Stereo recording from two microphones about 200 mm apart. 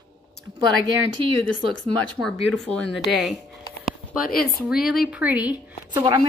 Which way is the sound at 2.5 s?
5° left (ahead or behind).